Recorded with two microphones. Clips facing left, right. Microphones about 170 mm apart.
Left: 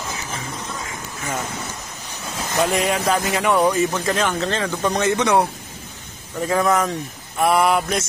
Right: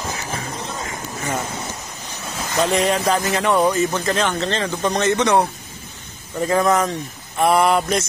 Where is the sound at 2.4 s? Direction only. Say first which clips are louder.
Right 1 dB; 5° left (ahead or behind).